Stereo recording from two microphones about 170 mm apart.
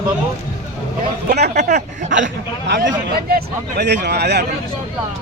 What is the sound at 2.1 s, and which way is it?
Speech, 90° right.